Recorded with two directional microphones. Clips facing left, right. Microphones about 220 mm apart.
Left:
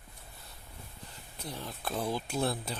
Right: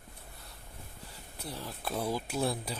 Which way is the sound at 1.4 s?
5° right (ahead or behind).